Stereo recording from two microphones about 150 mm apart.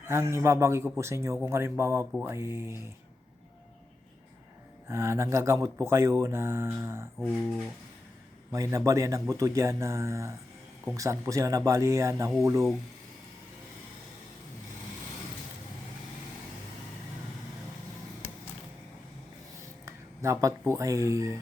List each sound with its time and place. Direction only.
0.1 s speech: 20° right (ahead or behind)
4.9 s speech: 20° right (ahead or behind)
7.3 s speech: centre (ahead or behind)
8.5 s speech: 20° right (ahead or behind)
19.8 s speech: 20° right (ahead or behind)